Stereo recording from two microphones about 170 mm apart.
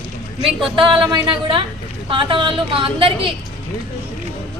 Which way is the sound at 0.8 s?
30° right (ahead or behind).